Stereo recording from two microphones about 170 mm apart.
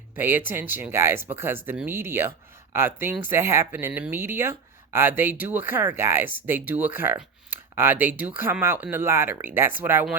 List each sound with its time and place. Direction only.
0.2 s speech: 10° right (ahead or behind)